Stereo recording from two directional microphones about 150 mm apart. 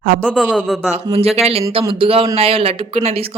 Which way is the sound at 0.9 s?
40° right (ahead or behind).